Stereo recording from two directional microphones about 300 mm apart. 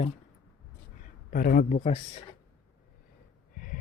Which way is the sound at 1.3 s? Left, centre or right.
Left.